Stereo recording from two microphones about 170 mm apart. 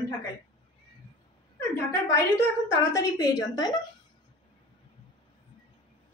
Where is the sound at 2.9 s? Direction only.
20° left (ahead or behind).